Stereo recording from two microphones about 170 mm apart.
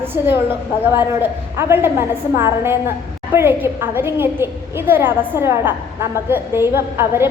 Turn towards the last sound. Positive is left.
turn(degrees=-15)  # may be behind; listen again after turning